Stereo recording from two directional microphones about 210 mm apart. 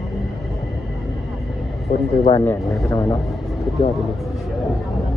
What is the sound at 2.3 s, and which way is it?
Speech, 10° left (ahead or behind).